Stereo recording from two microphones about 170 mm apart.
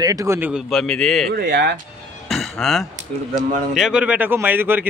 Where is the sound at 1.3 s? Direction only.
70° right (ahead or behind).